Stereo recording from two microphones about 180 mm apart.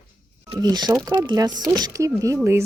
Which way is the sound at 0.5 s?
20° right (ahead or behind).